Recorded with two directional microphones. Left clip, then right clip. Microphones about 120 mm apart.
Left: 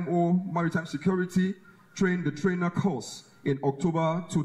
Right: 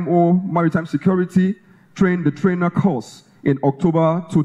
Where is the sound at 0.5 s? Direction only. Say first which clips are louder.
Right 10 dB; centre (ahead or behind).